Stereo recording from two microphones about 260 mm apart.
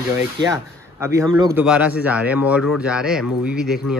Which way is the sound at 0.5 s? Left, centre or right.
Centre.